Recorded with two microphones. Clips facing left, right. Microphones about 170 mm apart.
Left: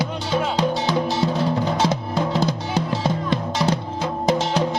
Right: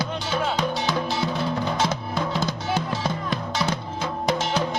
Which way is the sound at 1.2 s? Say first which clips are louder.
Left 4 dB; 35° left (ahead or behind).